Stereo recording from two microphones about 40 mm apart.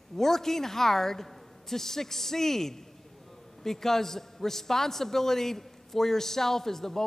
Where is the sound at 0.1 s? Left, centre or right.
Centre.